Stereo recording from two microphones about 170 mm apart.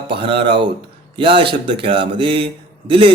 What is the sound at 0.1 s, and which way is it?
A man's voice, 30° right (ahead or behind).